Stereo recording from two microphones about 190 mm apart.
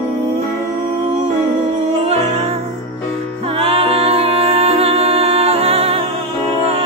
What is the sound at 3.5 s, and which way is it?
Music, 30° right (ahead or behind).